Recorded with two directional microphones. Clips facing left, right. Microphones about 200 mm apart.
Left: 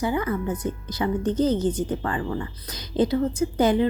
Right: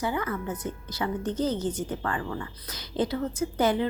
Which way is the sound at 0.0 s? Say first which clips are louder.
Left 5 dB; 15° left (ahead or behind).